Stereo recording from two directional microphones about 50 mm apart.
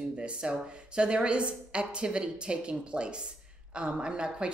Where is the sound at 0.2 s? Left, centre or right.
Centre.